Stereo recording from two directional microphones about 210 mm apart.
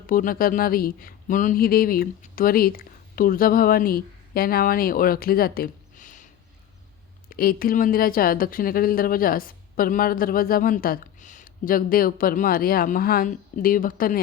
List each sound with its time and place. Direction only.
0.1 s speech: 40° left (ahead or behind)
7.3 s speech: 45° left (ahead or behind)